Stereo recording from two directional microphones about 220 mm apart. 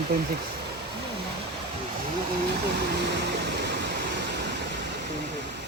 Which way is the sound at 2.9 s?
50° right (ahead or behind).